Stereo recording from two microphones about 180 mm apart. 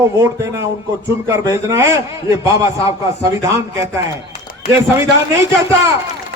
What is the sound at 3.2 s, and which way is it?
Speech, 15° right (ahead or behind).